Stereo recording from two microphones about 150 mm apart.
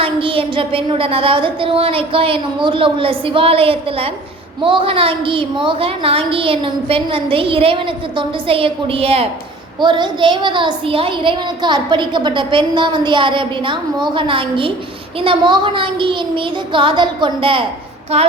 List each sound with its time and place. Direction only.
0.0 s a child's voice: 35° right (ahead or behind)
18.1 s female singing: 45° right (ahead or behind)